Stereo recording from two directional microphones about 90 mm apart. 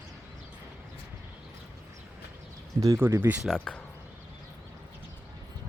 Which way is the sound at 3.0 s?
25° right (ahead or behind).